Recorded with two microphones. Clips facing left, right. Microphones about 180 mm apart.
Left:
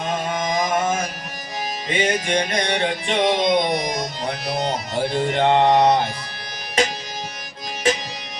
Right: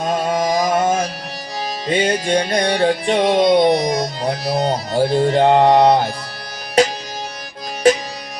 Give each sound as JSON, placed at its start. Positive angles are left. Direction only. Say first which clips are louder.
{"t": 0.2, "sound": "music", "louder": "right 5 dB", "side_deg": -35}